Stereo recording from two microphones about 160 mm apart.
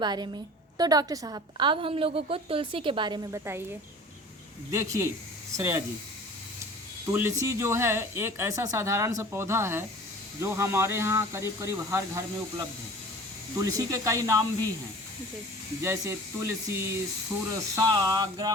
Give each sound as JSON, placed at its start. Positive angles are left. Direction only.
{"t": 0.0, "sound": "a woman's voice", "side_deg": -25}
{"t": 4.7, "sound": "speech", "side_deg": -20}
{"t": 7.0, "sound": "speech", "side_deg": -15}
{"t": 13.7, "sound": "speech", "side_deg": -20}
{"t": 15.8, "sound": "speech", "side_deg": -15}